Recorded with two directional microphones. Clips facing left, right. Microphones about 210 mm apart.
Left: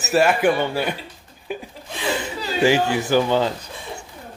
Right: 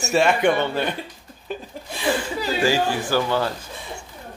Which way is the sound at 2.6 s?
20° left (ahead or behind).